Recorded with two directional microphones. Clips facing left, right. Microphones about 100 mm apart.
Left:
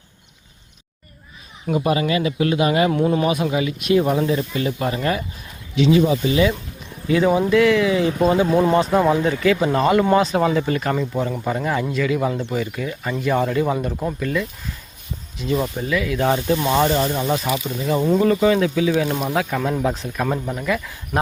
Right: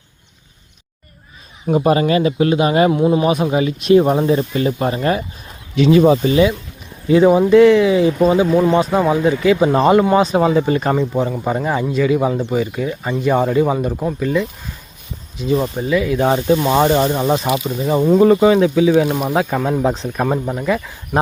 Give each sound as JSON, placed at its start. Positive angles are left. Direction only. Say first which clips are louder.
{"t": 1.6, "sound": "speech", "louder": "right 5 dB", "side_deg": -35}
{"t": 2.9, "sound": "speech", "louder": "right 4 dB", "side_deg": -15}
{"t": 3.2, "sound": "speech", "louder": "right 4 dB", "side_deg": -30}
{"t": 5.7, "sound": "speech", "louder": "right 5 dB", "side_deg": -50}
{"t": 7.1, "sound": "speech", "louder": "right 6 dB", "side_deg": -25}
{"t": 8.2, "sound": "speech", "louder": "right 2 dB", "side_deg": -10}
{"t": 8.4, "sound": "speech", "louder": "right 3 dB", "side_deg": 0}
{"t": 8.7, "sound": "speech", "louder": "right 2 dB", "side_deg": -10}